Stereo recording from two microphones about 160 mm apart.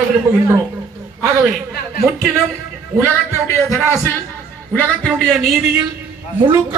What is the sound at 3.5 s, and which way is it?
Speech, 15° left (ahead or behind).